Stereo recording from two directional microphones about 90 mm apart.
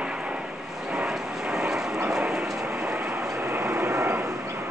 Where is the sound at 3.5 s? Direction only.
30° right (ahead or behind).